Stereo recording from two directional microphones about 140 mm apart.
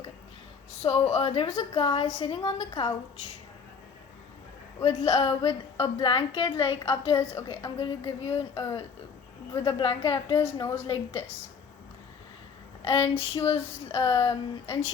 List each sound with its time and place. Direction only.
0.8 s a woman's voice: 45° left (ahead or behind)
4.8 s a woman's voice: 45° left (ahead or behind)
7.1 s a woman's voice: 20° left (ahead or behind)
7.4 s a woman's voice: 35° left (ahead or behind)
12.8 s a woman's voice: 40° left (ahead or behind)